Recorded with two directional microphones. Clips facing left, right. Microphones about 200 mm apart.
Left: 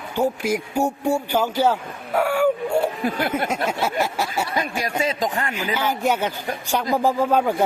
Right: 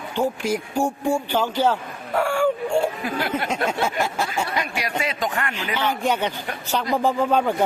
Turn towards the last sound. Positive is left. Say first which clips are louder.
# left 1 dB
turn(degrees=5)  # may be behind; listen again after turning